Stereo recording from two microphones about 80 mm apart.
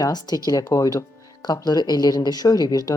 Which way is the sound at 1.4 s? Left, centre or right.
Left.